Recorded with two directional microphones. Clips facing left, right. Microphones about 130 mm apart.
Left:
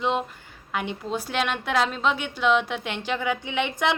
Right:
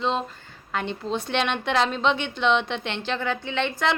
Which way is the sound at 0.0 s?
15° left (ahead or behind).